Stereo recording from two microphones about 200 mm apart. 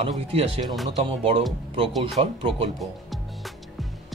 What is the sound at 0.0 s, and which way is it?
Speech, 30° right (ahead or behind).